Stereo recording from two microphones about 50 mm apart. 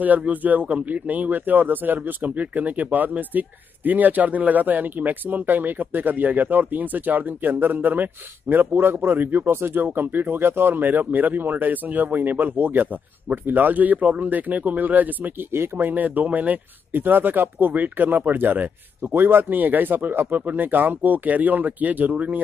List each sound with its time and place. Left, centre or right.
0.0 s speech: right
15.5 s speech: right
15.9 s speech: right